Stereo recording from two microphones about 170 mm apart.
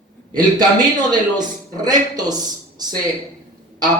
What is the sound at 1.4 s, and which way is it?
Speech, 25° right (ahead or behind).